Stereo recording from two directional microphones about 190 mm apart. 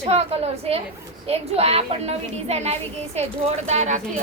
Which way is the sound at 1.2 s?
35° right (ahead or behind).